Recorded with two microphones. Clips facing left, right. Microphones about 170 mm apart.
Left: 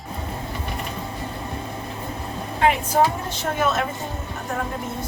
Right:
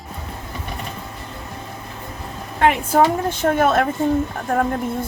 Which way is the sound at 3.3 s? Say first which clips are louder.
Right 6 dB; 50° right (ahead or behind).